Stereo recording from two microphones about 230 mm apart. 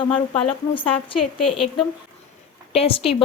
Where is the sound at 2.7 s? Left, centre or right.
Left.